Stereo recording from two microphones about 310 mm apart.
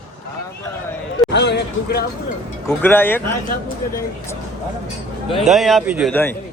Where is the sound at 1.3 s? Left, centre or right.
Left.